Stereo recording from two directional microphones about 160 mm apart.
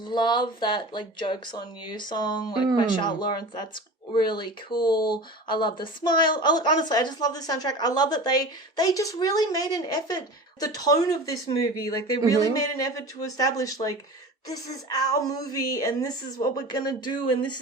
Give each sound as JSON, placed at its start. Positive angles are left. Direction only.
{"t": 0.0, "sound": "speech", "side_deg": 30}